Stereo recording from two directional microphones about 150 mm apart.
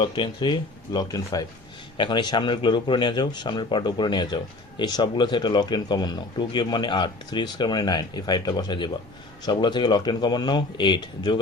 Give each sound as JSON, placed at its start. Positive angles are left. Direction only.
{"t": 0.0, "sound": "speech", "side_deg": 30}